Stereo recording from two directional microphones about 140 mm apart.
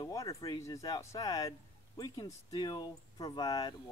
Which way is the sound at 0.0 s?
25° left (ahead or behind).